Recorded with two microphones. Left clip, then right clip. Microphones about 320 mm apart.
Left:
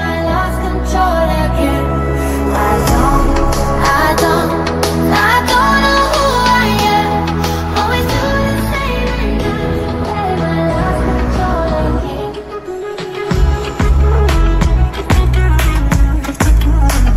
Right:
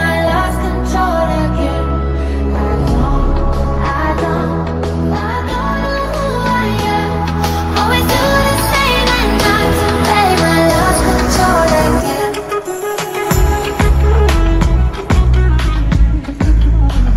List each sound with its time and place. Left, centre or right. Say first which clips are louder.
0.0 s music: right 2 dB; centre
0.9 s music: left 1 dB; centre
3.8 s music: left 5 dB; left
5.8 s music: left 6 dB; left
7.4 s music: right 1 dB; centre; by 9.6 s right
10.0 s music: right 7 dB; right